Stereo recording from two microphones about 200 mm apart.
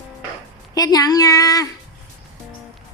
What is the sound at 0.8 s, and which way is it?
Speech, 20° left (ahead or behind).